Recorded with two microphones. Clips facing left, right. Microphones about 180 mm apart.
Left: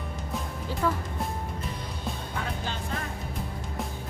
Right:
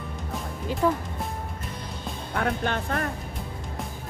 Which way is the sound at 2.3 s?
60° right (ahead or behind).